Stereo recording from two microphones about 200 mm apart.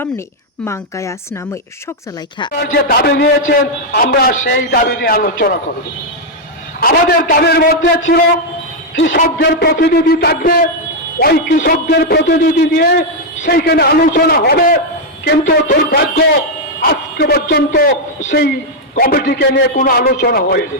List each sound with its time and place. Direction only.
0.6 s speech: 15° left (ahead or behind)
2.6 s a man's voice: 50° left (ahead or behind)
6.7 s a man's voice: 50° left (ahead or behind)
9.4 s a man's voice: 55° left (ahead or behind)